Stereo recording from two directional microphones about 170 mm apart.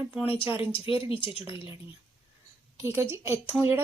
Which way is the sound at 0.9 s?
30° left (ahead or behind).